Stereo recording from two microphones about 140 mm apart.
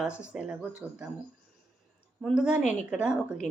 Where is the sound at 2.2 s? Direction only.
5° right (ahead or behind).